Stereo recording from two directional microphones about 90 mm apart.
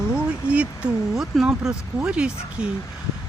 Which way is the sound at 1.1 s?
Centre (ahead or behind).